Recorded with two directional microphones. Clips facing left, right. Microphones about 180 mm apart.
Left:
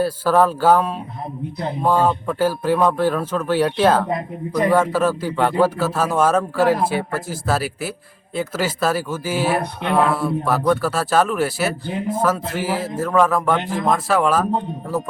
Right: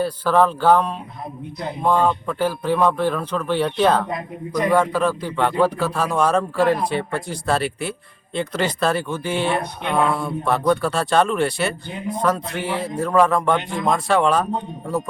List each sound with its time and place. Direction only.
0.0 s speech: 5° left (ahead or behind)
4.1 s a man's voice: 30° left (ahead or behind)
4.7 s speech: 5° left (ahead or behind)